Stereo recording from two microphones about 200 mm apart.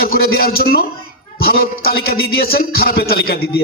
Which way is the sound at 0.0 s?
50° left (ahead or behind).